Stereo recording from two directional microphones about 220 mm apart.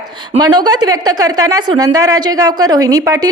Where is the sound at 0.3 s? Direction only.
20° right (ahead or behind).